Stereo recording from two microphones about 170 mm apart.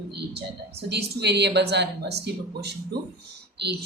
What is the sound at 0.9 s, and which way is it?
A woman's voice, 80° right.